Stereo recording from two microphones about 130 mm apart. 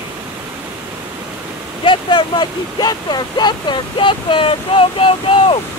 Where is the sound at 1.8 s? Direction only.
40° left (ahead or behind).